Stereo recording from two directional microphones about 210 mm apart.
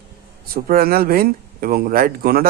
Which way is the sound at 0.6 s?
45° right (ahead or behind).